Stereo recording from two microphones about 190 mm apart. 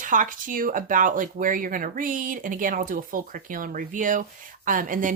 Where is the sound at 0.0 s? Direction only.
45° right (ahead or behind).